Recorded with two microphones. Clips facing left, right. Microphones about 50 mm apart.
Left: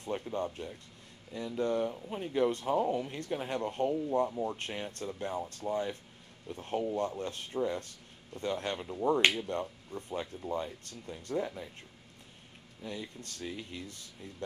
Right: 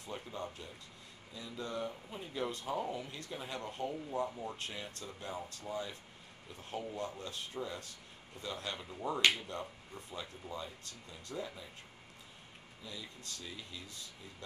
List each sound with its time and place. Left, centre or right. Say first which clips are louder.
0.0 s speech: left 8 dB; left
9.0 s speech: left 5 dB; left
9.5 s speech: left 7 dB; left
12.8 s speech: left 7 dB; left